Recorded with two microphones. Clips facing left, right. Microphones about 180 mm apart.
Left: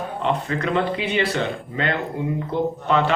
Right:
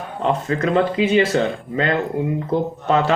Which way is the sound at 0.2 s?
40° right (ahead or behind).